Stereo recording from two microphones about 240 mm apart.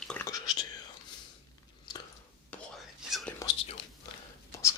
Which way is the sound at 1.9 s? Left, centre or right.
Centre.